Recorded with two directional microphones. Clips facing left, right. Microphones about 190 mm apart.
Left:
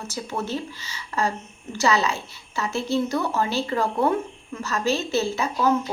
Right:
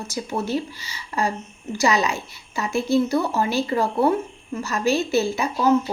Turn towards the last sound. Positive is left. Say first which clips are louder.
# right 2 dB
turn(degrees=-15)  # may be behind; listen again after turning